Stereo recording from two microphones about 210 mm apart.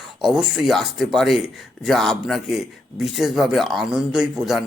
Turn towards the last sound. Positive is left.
turn(degrees=0)  # may be behind; listen again after turning